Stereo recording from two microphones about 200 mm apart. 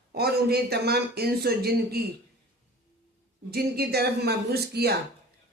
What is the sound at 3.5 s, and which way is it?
A man's voice, 50° right (ahead or behind).